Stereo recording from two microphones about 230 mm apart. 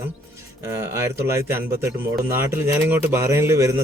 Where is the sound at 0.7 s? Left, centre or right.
Centre.